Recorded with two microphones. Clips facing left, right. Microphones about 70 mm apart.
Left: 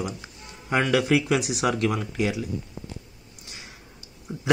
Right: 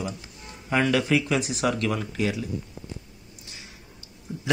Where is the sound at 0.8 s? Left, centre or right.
Left.